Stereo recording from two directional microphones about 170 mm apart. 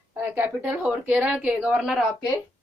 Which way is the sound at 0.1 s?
10° right (ahead or behind).